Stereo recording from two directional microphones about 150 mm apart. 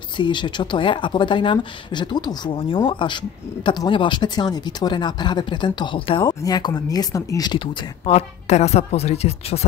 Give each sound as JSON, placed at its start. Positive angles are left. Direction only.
{"t": 0.2, "sound": "speech", "side_deg": 30}